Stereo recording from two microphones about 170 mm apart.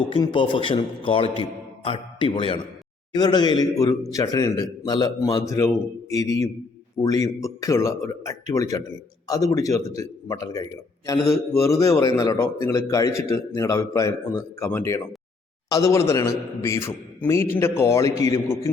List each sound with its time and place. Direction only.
0.1 s a man's voice: 30° left (ahead or behind)